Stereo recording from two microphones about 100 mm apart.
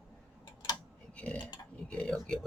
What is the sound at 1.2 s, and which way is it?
Speech, 10° left (ahead or behind).